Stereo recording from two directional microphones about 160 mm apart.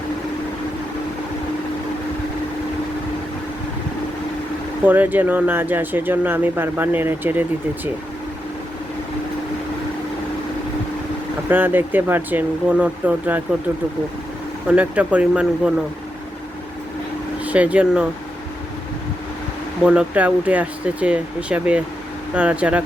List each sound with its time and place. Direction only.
4.9 s speech: 10° right (ahead or behind)
11.4 s speech: 10° right (ahead or behind)
14.7 s speech: 10° right (ahead or behind)
17.4 s speech: 10° right (ahead or behind)
19.8 s speech: 5° right (ahead or behind)